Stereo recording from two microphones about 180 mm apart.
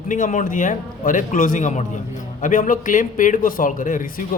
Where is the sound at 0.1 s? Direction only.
45° left (ahead or behind).